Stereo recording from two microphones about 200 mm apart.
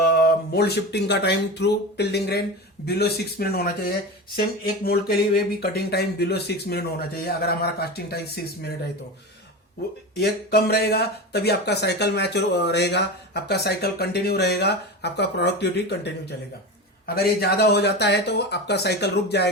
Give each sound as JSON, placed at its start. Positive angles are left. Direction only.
{"t": 0.3, "sound": "speech", "side_deg": 55}
{"t": 10.2, "sound": "speech", "side_deg": 50}
{"t": 17.4, "sound": "speech", "side_deg": 55}